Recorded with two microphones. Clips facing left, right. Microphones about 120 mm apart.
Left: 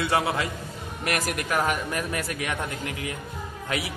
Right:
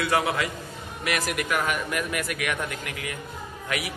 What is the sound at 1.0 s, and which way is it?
Speech, 45° left (ahead or behind).